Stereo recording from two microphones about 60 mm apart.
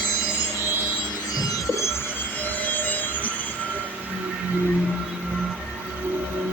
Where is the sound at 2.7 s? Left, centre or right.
Left.